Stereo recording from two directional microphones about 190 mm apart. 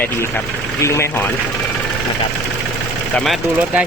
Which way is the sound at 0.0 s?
10° left (ahead or behind).